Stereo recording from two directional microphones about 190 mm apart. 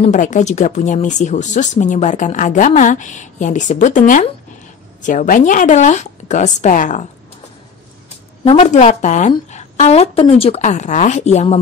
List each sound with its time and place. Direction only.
0.0 s speech: 40° left (ahead or behind)
8.5 s speech: 35° left (ahead or behind)